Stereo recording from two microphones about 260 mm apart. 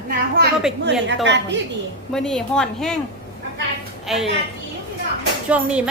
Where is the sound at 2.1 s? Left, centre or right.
Centre.